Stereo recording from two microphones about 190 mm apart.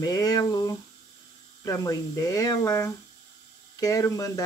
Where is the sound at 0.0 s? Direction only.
20° left (ahead or behind).